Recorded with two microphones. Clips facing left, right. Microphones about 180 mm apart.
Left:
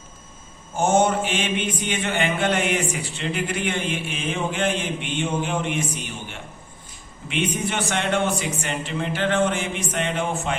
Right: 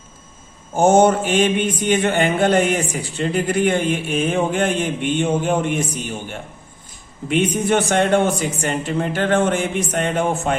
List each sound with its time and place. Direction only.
0.8 s mantra: 40° right (ahead or behind)
7.3 s mantra: 45° right (ahead or behind)